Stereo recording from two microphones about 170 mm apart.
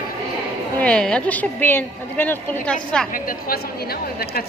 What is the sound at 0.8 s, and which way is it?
A woman's voice, 5° left (ahead or behind).